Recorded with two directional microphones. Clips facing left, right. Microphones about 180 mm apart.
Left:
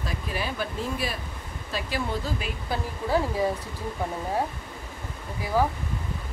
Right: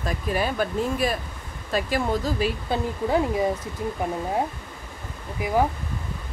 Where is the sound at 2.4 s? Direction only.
20° right (ahead or behind).